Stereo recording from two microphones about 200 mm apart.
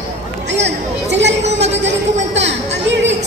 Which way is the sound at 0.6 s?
60° right (ahead or behind).